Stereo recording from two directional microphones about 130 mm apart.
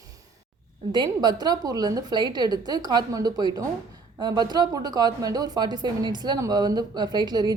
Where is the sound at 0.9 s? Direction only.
35° right (ahead or behind).